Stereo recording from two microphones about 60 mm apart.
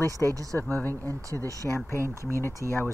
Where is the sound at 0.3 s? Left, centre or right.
Right.